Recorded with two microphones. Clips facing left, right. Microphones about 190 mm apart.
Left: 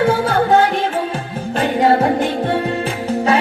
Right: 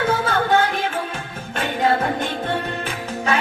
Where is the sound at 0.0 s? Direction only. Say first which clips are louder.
Left 5 dB; 35° left (ahead or behind).